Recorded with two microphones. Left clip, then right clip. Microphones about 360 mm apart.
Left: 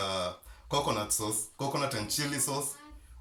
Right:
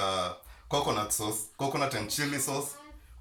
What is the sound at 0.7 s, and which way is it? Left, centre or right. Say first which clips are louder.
Speech: right 1 dB; centre.